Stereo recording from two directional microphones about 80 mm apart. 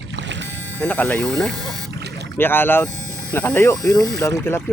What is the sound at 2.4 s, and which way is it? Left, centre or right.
Speech, left.